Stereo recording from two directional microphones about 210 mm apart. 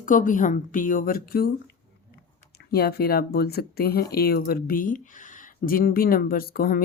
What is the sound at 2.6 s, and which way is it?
Speech, 45° left (ahead or behind).